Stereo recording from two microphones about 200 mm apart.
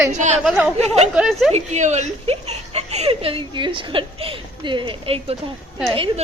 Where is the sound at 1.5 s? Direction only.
35° right (ahead or behind).